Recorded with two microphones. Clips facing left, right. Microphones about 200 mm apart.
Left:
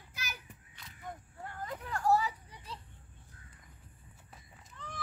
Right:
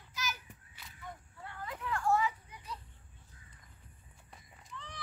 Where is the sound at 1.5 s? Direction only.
45° left (ahead or behind).